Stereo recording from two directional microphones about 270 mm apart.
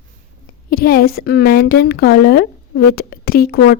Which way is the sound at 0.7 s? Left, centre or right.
Left.